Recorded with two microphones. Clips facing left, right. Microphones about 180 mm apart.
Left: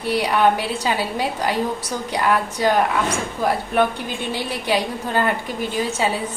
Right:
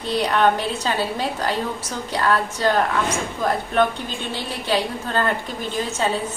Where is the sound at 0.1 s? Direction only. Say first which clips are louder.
Left 1 dB; 10° left (ahead or behind).